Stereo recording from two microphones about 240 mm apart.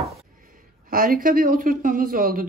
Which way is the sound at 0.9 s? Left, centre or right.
Right.